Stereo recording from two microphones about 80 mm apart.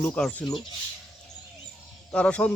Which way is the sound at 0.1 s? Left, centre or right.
Centre.